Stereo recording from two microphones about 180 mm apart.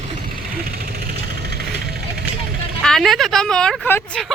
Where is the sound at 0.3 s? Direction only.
55° right (ahead or behind).